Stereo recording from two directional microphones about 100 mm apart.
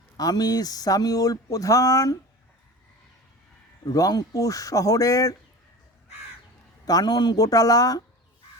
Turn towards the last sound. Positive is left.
turn(degrees=35)  # may be behind; listen again after turning